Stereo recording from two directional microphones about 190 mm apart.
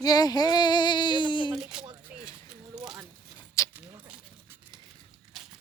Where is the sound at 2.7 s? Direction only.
5° right (ahead or behind).